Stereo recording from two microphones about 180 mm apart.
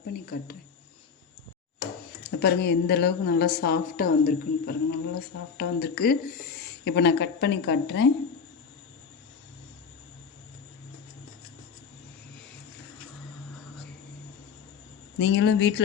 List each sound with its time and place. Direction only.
0.1 s speech: 60° left (ahead or behind)
2.2 s a woman's voice: 65° left (ahead or behind)
15.2 s speech: 90° left